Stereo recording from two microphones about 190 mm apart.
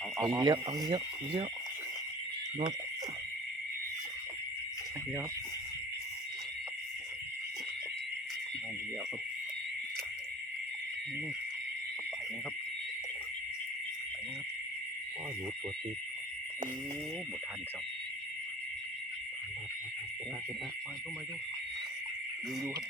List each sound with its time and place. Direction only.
0.2 s speech: 20° right (ahead or behind)